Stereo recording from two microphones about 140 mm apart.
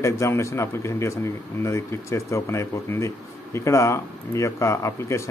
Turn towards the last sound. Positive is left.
turn(degrees=20)  # may be behind; listen again after turning